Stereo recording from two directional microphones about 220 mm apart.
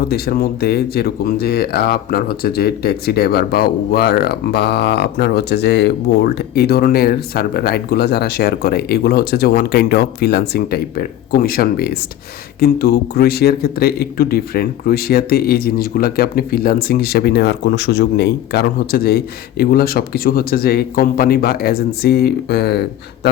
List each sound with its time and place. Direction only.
0.1 s speech: 45° left (ahead or behind)